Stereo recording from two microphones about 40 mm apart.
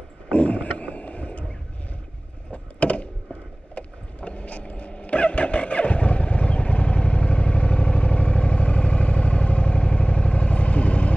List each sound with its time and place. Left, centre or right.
0.3 s vehicle: left
2.5 s a sound: left
3.7 s vehicle: left